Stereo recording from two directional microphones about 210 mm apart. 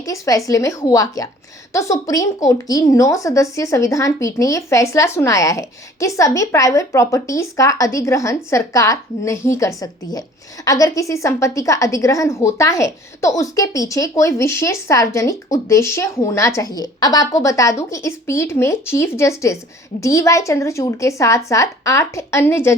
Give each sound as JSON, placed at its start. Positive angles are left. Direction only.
{"t": 0.0, "sound": "a woman's voice", "side_deg": 15}